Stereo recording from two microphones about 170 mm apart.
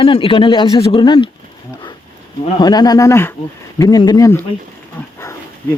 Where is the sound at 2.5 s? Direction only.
25° left (ahead or behind).